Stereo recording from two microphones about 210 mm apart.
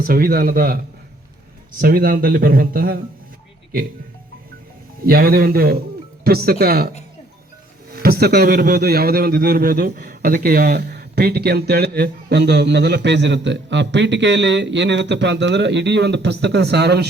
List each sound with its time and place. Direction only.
0.0 s a man's voice: 45° right (ahead or behind)
1.8 s a man's voice: 45° right (ahead or behind)
5.0 s a man's voice: 45° right (ahead or behind)